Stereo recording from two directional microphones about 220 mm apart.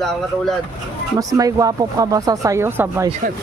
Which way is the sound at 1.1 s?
15° right (ahead or behind).